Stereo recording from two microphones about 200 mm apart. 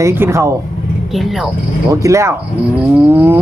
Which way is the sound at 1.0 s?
Centre (ahead or behind).